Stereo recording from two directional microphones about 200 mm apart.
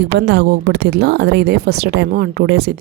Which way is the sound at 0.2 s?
60° right (ahead or behind).